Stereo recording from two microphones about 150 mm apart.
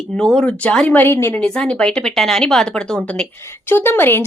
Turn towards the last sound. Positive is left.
turn(degrees=15)  # may be behind; listen again after turning